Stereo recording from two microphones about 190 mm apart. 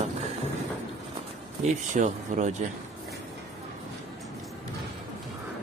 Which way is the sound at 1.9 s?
40° right (ahead or behind).